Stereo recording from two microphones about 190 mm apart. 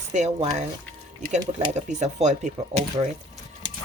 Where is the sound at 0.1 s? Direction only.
40° right (ahead or behind).